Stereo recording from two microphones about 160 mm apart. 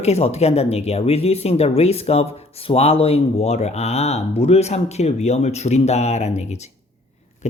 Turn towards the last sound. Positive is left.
turn(degrees=45)  # may be behind; listen again after turning